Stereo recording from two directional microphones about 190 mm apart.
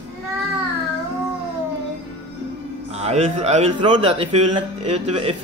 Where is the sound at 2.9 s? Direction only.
35° right (ahead or behind).